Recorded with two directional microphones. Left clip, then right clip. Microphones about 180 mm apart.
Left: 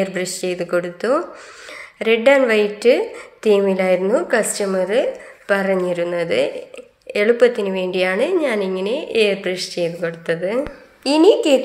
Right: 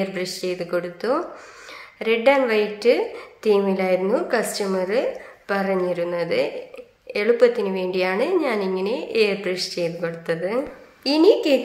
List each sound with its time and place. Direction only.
0.0 s a woman's voice: 20° left (ahead or behind)